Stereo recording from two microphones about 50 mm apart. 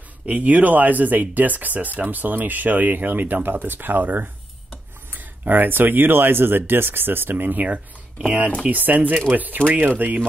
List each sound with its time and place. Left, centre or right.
0.3 s speech: right
7.6 s speech: right